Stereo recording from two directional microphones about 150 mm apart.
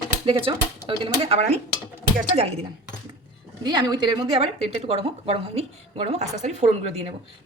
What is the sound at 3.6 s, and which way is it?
A woman's voice, 30° right (ahead or behind).